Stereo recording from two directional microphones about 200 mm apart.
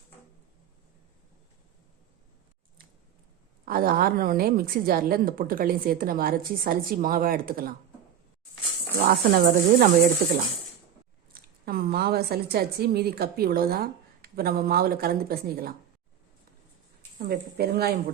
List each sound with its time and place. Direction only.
3.7 s a woman's voice: 45° right (ahead or behind)
9.0 s a woman's voice: 45° right (ahead or behind)
11.3 s a woman's voice: 50° right (ahead or behind)
17.2 s a woman's voice: 50° right (ahead or behind)